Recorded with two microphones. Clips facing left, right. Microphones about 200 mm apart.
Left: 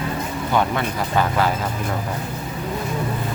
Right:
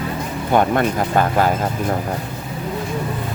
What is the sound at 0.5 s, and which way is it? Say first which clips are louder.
Speech: right 5 dB; 50° right (ahead or behind).